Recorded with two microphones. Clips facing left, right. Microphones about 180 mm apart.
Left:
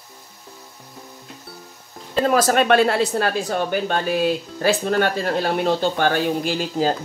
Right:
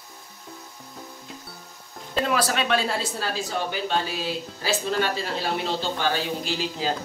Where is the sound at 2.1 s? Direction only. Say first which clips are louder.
Left 7 dB; 40° left (ahead or behind).